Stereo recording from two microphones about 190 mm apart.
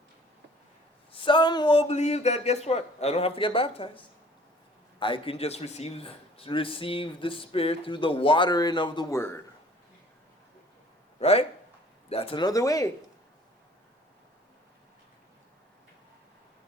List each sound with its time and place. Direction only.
1.1 s a man's voice: 25° left (ahead or behind)
11.2 s a man's voice: 30° left (ahead or behind); by 12.9 s 15° left (ahead or behind)